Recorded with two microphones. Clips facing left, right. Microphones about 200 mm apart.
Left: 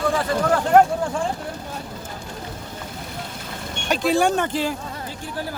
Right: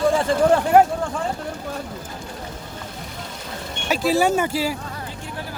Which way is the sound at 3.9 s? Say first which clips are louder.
Even; 5° right (ahead or behind).